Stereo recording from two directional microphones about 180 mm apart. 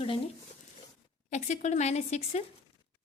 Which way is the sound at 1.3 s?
40° left (ahead or behind).